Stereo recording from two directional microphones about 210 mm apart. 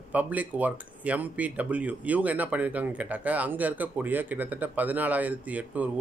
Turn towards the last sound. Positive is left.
turn(degrees=-5)  # may be behind; listen again after turning